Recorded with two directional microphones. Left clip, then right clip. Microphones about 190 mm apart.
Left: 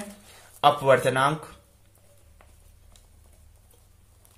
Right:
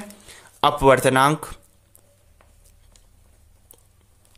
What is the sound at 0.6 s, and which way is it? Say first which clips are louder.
Speech: right 3 dB; 50° right (ahead or behind).